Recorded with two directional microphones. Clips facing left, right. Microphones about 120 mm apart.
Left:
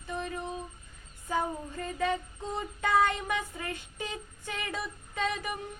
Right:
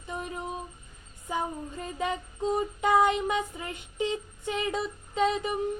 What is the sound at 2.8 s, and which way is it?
Female singing, 15° right (ahead or behind).